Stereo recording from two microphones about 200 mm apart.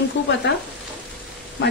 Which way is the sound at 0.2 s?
60° left (ahead or behind).